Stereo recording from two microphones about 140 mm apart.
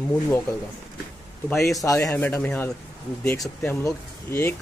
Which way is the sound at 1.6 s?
25° left (ahead or behind).